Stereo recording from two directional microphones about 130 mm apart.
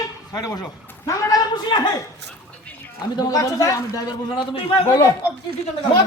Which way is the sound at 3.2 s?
25° left (ahead or behind).